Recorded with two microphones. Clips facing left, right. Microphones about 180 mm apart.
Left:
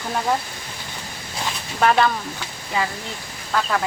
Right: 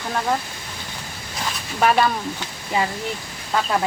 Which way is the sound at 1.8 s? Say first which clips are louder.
Even; 10° right (ahead or behind).